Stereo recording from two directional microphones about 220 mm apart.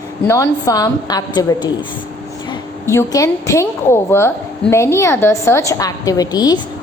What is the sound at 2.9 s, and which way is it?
A woman's voice, 15° left (ahead or behind).